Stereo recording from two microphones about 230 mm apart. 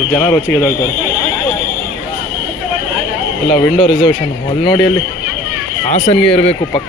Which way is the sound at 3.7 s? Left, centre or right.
Centre.